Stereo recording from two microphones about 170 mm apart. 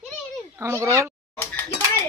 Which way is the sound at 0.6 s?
15° right (ahead or behind).